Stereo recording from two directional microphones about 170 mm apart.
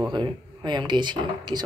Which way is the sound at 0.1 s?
25° right (ahead or behind).